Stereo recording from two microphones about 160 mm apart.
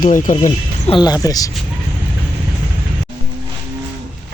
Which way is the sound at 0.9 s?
25° left (ahead or behind).